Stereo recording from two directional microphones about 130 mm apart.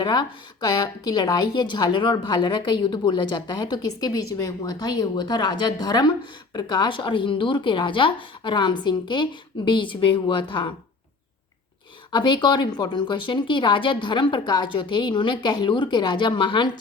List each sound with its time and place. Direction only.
0.0 s speech: 30° left (ahead or behind)
12.1 s speech: 35° left (ahead or behind)